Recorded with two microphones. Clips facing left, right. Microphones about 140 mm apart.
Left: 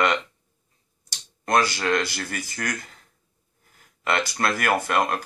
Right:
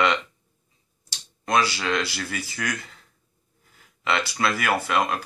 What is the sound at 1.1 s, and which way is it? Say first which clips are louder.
Speech: left 2 dB; 45° left (ahead or behind).